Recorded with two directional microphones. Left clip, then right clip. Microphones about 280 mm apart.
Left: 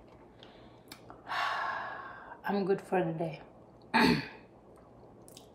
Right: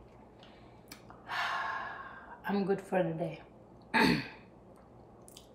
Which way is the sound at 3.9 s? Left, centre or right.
Centre.